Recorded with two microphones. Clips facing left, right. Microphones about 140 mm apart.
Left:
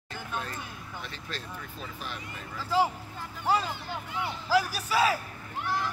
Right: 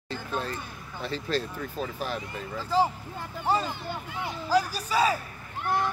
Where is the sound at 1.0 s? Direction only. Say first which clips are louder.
Right 15 dB; 35° right (ahead or behind).